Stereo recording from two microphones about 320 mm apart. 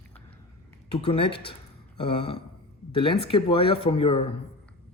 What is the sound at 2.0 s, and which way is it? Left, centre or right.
A man's voice, centre.